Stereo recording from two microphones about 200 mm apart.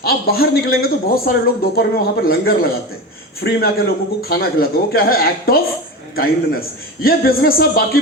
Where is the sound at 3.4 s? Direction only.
50° left (ahead or behind).